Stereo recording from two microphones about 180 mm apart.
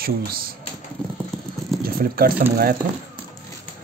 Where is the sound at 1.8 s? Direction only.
55° right (ahead or behind).